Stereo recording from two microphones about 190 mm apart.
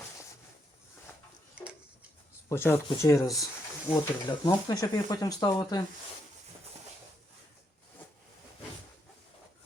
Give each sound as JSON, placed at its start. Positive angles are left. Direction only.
{"t": 2.5, "sound": "speech", "side_deg": 10}
{"t": 3.9, "sound": "speech", "side_deg": 30}